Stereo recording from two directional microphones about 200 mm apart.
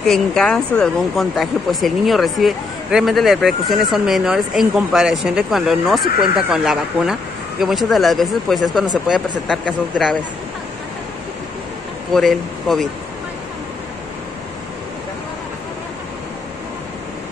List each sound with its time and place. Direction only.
0.0 s speech: centre (ahead or behind)
12.1 s speech: centre (ahead or behind)